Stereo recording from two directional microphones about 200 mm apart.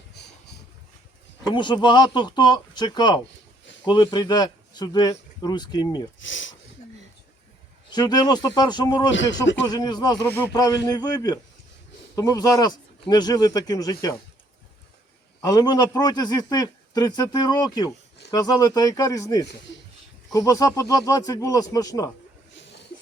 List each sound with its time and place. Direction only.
1.5 s speech: 20° left (ahead or behind)
6.1 s speech: 70° left (ahead or behind)
7.9 s speech: 20° left (ahead or behind)
9.1 s speech: 65° left (ahead or behind)
9.6 s speech: 20° left (ahead or behind)
15.4 s speech: 20° left (ahead or behind)
22.5 s a sound: 60° left (ahead or behind)